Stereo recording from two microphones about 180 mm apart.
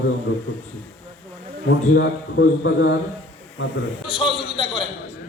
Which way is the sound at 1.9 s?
80° left.